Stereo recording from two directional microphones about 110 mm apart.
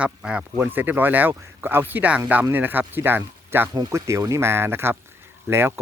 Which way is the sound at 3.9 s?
30° right (ahead or behind).